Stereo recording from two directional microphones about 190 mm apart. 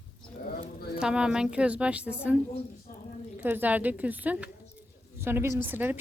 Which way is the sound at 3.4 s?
10° right (ahead or behind).